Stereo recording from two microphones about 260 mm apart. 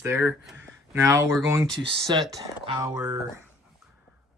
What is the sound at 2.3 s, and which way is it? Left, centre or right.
Speech, centre.